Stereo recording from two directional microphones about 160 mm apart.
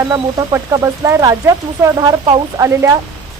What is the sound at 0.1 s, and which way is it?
Speech, 25° right (ahead or behind).